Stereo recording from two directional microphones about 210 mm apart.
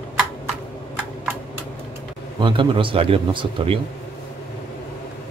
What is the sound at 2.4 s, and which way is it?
Speech, 25° right (ahead or behind).